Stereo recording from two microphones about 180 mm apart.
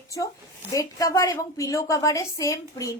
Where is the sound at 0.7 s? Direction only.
20° left (ahead or behind).